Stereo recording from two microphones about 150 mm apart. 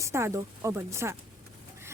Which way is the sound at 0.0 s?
20° right (ahead or behind).